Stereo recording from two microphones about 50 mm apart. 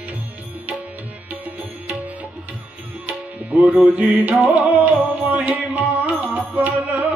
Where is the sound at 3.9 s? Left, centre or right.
Right.